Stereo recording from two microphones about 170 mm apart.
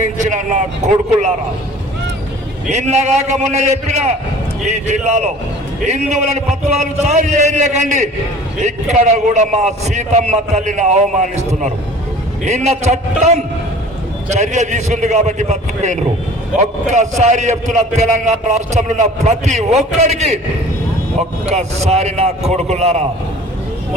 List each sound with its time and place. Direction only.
0.2 s a sound: 45° right (ahead or behind)
2.7 s a man's voice: 40° right (ahead or behind)
9.1 s a man's voice: 45° right (ahead or behind)
12.5 s a man's voice: 40° right (ahead or behind)